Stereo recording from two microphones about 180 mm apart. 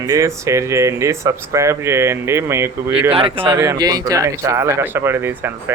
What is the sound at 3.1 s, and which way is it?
Speech, 30° right (ahead or behind).